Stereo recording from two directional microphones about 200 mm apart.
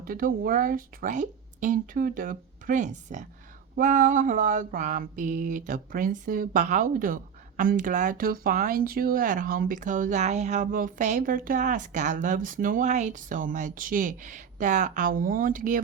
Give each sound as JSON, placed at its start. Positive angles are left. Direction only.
{"t": 0.0, "sound": "speech", "side_deg": -45}
{"t": 3.8, "sound": "mantra", "side_deg": -35}